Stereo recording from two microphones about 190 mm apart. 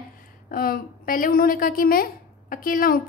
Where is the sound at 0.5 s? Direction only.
50° left (ahead or behind).